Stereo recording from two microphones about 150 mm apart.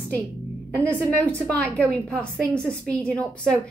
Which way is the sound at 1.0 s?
15° right (ahead or behind).